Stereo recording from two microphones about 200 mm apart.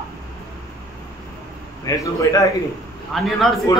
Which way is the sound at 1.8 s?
15° left (ahead or behind).